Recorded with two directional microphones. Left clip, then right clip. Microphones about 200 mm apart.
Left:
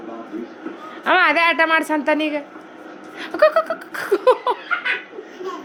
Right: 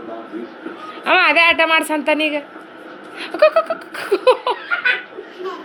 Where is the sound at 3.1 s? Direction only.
15° left (ahead or behind).